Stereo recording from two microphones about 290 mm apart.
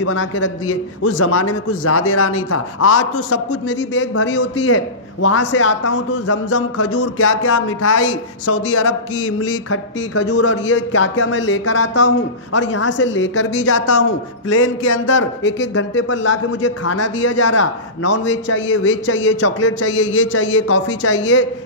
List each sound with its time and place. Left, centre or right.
0.0 s a man's voice: left
18.1 s a man's voice: left
19.4 s a man's voice: left